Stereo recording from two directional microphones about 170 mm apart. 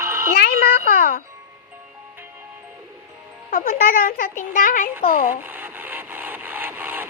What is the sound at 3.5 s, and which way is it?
Speech, 60° left (ahead or behind).